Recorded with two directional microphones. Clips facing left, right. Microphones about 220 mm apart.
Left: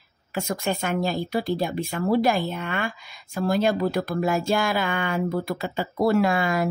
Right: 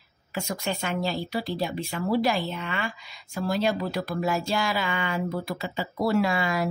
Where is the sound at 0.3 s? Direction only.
50° left (ahead or behind).